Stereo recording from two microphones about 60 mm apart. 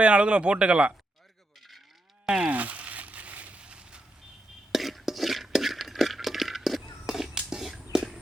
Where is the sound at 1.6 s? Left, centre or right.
Centre.